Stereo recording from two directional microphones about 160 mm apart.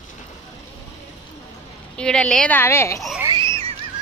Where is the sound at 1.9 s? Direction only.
5° left (ahead or behind).